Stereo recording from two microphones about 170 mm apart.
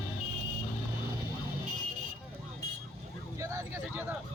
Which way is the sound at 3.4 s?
15° right (ahead or behind).